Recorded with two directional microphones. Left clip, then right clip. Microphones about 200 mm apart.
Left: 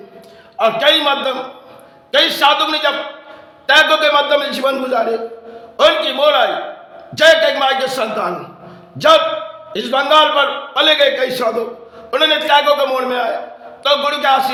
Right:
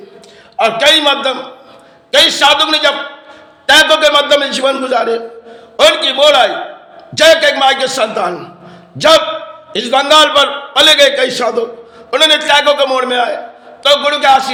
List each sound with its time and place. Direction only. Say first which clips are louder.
0.5 s a man's voice: right 3 dB; 20° right (ahead or behind)